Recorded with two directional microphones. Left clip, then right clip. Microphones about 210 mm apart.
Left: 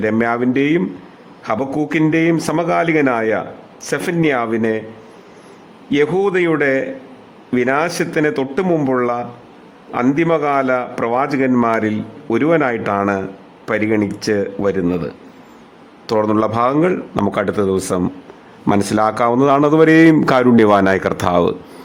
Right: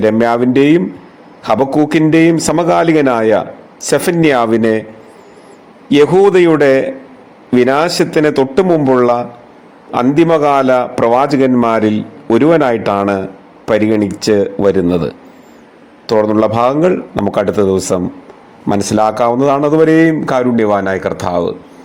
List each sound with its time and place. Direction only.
0.0 s a man's voice: 10° right (ahead or behind)
5.9 s a man's voice: 15° right (ahead or behind); by 21.5 s 10° left (ahead or behind)